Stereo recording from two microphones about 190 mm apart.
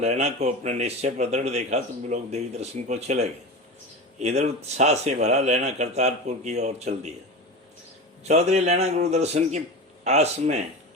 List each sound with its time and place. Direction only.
0.0 s a man's voice: 35° right (ahead or behind)
8.2 s a man's voice: 35° right (ahead or behind)